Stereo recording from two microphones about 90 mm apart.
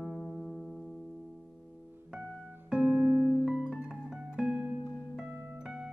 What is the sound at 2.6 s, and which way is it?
Music, 15° right (ahead or behind).